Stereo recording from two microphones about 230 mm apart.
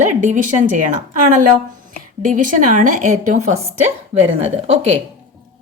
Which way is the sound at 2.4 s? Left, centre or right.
Right.